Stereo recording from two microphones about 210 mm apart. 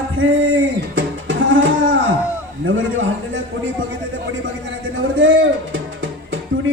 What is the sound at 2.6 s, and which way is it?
Speech, 65° right (ahead or behind).